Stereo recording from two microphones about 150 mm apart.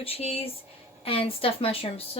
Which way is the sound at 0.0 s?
40° left (ahead or behind).